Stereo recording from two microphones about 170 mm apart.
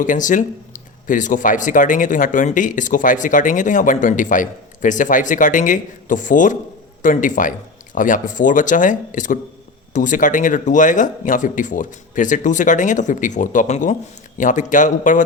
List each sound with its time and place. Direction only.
0.0 s speech: 50° left (ahead or behind)